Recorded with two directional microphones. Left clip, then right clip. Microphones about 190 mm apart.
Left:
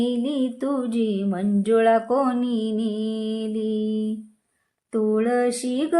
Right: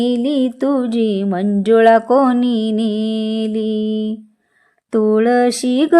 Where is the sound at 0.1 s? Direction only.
30° right (ahead or behind).